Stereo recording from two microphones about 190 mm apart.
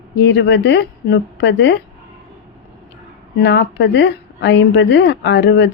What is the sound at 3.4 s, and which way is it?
Speech, 65° left (ahead or behind).